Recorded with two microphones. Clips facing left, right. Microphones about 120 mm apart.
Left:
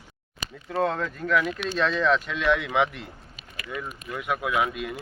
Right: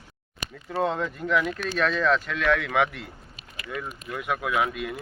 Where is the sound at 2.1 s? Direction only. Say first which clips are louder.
Even; 10° left (ahead or behind).